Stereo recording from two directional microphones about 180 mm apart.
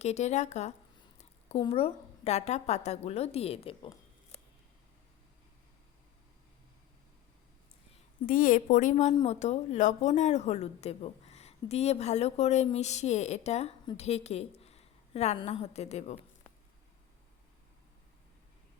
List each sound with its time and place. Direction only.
0.0 s a woman's voice: 40° left (ahead or behind)
1.2 s a sound: 35° left (ahead or behind)
1.7 s a woman's voice: 35° left (ahead or behind)
8.3 s a woman's voice: 50° left (ahead or behind)